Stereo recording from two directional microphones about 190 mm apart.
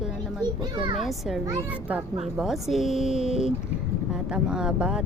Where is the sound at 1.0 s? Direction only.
Centre (ahead or behind).